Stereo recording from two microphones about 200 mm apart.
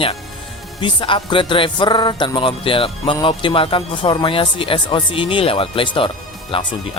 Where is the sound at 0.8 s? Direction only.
25° left (ahead or behind).